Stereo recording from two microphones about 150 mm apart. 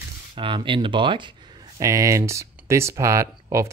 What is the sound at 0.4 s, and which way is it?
Speech, 35° right (ahead or behind).